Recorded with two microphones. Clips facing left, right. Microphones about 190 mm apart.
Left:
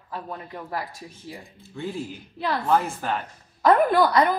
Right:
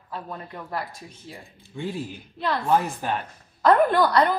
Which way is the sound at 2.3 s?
10° left (ahead or behind).